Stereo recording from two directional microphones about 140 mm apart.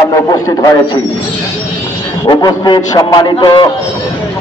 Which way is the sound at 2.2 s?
30° left (ahead or behind).